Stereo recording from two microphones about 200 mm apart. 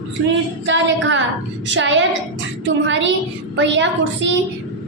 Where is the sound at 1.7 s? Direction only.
65° right (ahead or behind).